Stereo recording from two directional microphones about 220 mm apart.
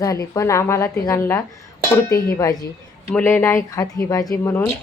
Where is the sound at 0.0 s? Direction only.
15° left (ahead or behind).